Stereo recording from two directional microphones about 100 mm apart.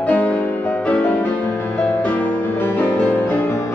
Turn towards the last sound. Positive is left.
turn(degrees=15)  # may be behind; listen again after turning